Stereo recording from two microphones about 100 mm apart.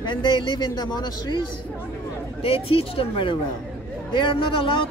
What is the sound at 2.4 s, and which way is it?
Speech, 70° left (ahead or behind).